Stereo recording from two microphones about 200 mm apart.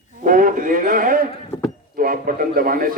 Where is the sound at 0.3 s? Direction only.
45° right (ahead or behind).